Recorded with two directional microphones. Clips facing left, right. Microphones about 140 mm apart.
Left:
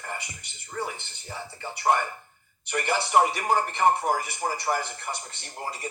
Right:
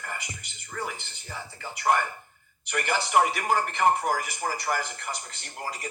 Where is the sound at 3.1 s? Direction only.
30° left (ahead or behind).